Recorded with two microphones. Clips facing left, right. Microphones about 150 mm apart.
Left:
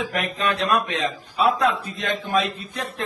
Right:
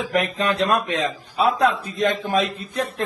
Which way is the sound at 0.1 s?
40° right (ahead or behind).